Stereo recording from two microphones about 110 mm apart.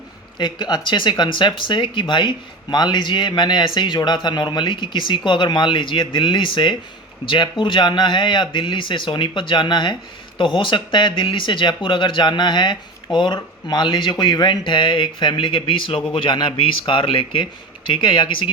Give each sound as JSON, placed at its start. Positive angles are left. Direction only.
{"t": 0.3, "sound": "speech", "side_deg": 45}